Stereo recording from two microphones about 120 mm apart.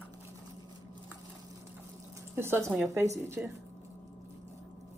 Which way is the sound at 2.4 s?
20° right (ahead or behind).